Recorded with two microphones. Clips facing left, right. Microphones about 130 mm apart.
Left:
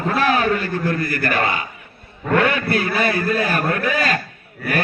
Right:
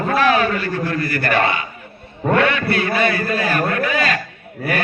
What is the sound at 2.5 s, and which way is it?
Speech, 45° left (ahead or behind).